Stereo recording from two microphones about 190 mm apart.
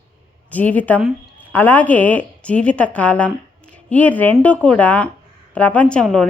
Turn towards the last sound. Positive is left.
turn(degrees=5)  # may be behind; listen again after turning